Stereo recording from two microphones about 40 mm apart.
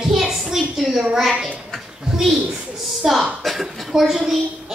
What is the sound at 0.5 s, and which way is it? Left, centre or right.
Speech, centre.